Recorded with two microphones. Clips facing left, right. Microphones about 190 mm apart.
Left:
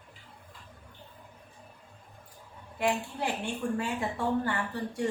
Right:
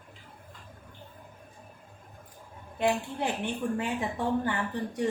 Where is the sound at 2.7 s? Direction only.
20° right (ahead or behind).